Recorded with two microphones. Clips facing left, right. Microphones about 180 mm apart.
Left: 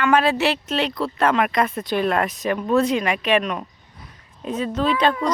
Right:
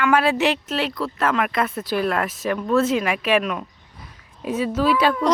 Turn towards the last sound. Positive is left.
turn(degrees=-5)  # may be behind; listen again after turning